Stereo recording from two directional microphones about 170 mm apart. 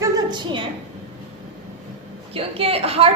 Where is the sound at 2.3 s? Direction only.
35° right (ahead or behind).